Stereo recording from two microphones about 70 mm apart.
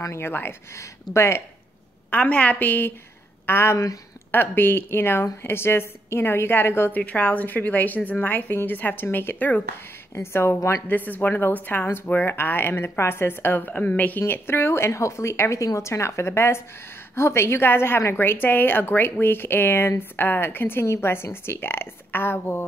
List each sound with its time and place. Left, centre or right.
0.0 s a woman's voice: left
2.0 s a woman's voice: centre; by 3.7 s left
3.7 s speech: left
4.3 s a woman's voice: left
6.9 s a woman's voice: left
10.1 s a woman's voice: left
10.9 s a woman's voice: left